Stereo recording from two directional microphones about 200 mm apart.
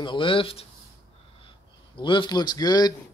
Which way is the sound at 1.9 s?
25° left (ahead or behind).